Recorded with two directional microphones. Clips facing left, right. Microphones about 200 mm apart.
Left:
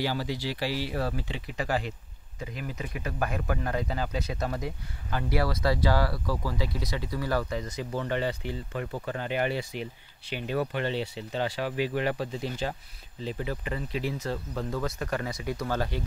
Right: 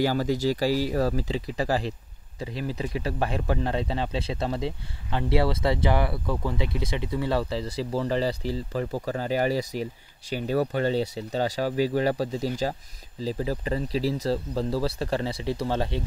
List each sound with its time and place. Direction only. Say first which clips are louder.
0.0 s speech: right 7 dB; 45° right (ahead or behind); by 16.0 s 25° right (ahead or behind)